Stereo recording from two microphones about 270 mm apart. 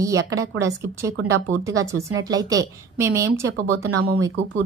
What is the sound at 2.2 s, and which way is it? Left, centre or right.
A woman's voice, centre.